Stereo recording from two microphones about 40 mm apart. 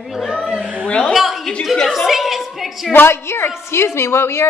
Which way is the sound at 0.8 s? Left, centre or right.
Left.